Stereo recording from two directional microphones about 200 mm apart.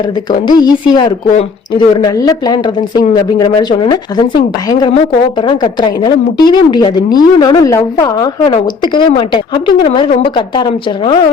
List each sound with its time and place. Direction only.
0.3 s a woman's voice: 20° left (ahead or behind)